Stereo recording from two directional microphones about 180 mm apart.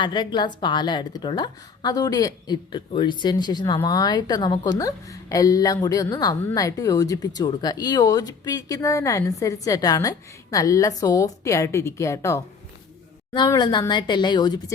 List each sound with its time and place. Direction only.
0.0 s speech: 25° left (ahead or behind)